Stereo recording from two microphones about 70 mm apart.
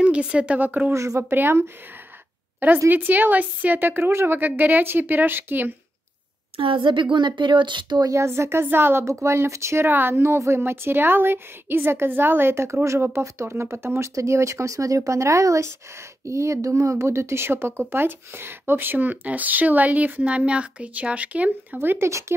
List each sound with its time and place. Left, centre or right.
0.0 s speech: centre
0.9 s speech: right
1.3 s a woman's voice: right
2.9 s speech: right
7.2 s speech: right
8.1 s a woman's voice: right
9.0 s a woman's voice: right
21.7 s a woman's voice: right